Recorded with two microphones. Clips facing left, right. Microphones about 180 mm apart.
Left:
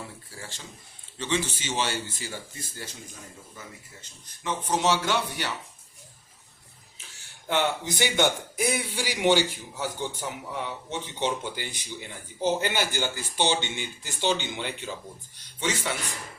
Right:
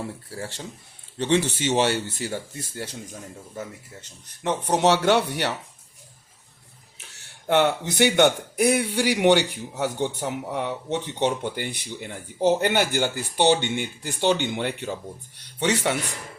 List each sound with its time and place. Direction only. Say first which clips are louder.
0.3 s a man's voice: right 7 dB; 65° right (ahead or behind)
4.4 s a man's voice: right 5 dB; 65° right (ahead or behind)
7.4 s a man's voice: right 6 dB; 60° right (ahead or behind)
15.5 s speech: right 6 dB; 65° right (ahead or behind)